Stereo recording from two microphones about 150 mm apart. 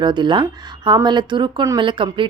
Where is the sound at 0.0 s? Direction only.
30° right (ahead or behind).